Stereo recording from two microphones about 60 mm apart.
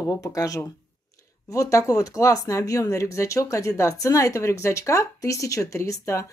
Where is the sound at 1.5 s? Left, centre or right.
Left.